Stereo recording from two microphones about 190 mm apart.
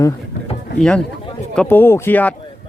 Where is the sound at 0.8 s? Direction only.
5° left (ahead or behind).